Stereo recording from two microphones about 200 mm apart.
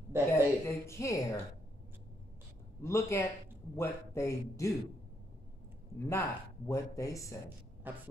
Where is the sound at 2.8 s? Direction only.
15° left (ahead or behind).